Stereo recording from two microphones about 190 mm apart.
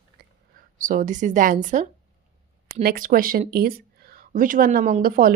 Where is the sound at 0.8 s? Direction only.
45° right (ahead or behind).